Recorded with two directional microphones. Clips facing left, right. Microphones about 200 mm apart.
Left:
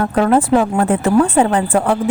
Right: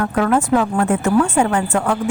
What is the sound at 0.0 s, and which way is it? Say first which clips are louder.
A woman's voice: left 3 dB; 30° left (ahead or behind).